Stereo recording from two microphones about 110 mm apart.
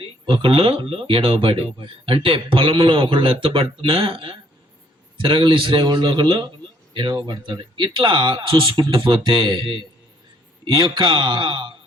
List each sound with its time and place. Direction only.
0.0 s speech: 55° right (ahead or behind)
10.9 s speech: 50° right (ahead or behind)